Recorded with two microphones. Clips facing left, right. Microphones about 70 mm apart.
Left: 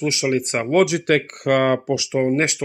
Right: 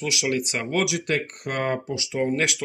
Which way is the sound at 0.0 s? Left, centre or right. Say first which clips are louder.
Left 5 dB; left.